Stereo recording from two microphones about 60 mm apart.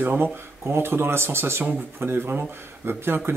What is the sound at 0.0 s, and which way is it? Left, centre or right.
Speech, right.